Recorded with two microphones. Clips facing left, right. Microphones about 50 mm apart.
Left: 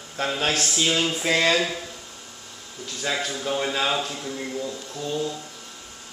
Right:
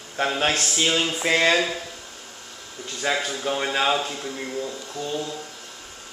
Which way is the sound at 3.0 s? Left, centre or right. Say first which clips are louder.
Right 2 dB; centre.